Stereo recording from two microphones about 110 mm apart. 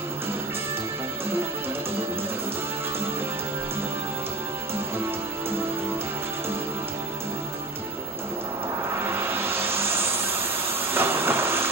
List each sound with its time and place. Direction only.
4.7 s music: 20° right (ahead or behind)
9.0 s music: 20° right (ahead or behind)
10.9 s train: 20° right (ahead or behind)